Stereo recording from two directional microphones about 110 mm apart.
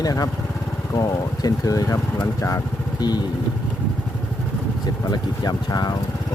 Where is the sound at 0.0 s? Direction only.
35° left (ahead or behind).